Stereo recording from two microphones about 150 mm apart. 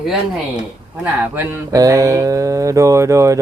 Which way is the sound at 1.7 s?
20° right (ahead or behind).